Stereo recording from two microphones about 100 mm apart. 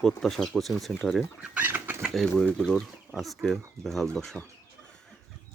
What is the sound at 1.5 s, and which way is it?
Bird, 20° right (ahead or behind).